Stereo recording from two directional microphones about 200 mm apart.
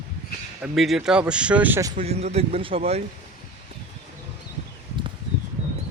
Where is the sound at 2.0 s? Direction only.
30° right (ahead or behind).